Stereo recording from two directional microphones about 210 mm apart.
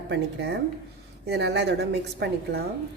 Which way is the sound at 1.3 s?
55° right (ahead or behind).